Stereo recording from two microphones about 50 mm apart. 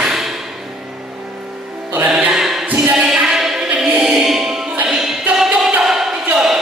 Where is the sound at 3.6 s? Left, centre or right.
Right.